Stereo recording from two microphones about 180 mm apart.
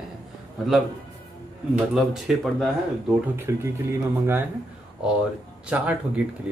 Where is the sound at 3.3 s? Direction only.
15° right (ahead or behind).